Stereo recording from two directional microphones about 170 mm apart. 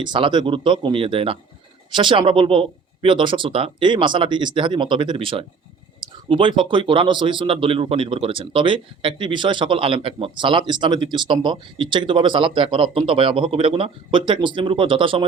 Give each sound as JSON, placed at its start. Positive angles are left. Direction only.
{"t": 0.0, "sound": "speech", "side_deg": -25}